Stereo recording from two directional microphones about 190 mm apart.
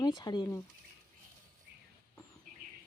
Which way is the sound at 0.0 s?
20° left (ahead or behind).